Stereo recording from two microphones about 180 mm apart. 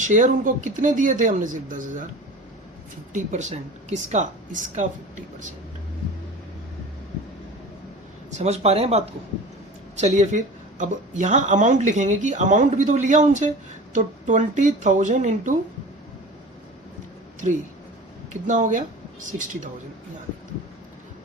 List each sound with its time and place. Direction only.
0.0 s speech: 45° right (ahead or behind)
3.1 s a woman's voice: 40° right (ahead or behind)
8.4 s a woman's voice: 35° right (ahead or behind)
18.4 s speech: 45° right (ahead or behind)